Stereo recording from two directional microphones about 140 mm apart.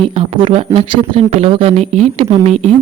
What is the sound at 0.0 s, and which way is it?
Speech, 45° right (ahead or behind).